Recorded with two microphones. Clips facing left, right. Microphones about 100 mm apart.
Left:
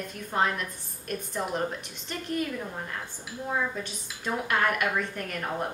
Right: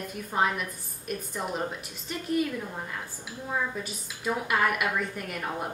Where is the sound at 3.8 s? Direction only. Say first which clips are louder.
Right 2 dB; 5° right (ahead or behind).